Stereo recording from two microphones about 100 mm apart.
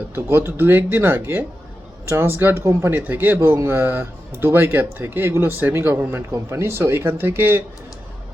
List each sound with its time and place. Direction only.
0.1 s speech: 25° right (ahead or behind)